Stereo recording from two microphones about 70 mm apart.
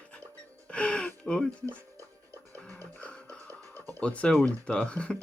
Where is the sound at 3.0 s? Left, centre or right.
Centre.